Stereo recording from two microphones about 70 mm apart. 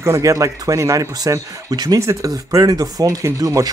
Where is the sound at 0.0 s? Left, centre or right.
Right.